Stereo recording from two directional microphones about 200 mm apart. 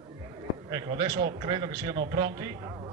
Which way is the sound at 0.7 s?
20° right (ahead or behind).